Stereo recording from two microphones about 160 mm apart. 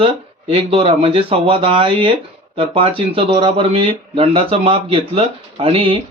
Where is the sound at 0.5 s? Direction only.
35° right (ahead or behind).